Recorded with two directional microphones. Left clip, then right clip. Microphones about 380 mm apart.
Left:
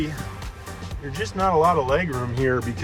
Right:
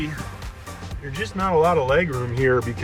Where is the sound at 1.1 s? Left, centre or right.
Centre.